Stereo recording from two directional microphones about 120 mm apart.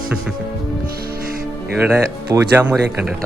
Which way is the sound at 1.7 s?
10° right (ahead or behind).